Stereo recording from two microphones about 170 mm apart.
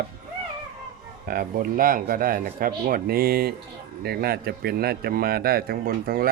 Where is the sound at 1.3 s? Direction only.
60° right (ahead or behind).